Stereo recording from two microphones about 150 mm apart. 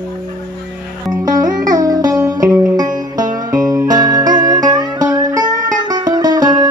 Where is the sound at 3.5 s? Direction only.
25° right (ahead or behind).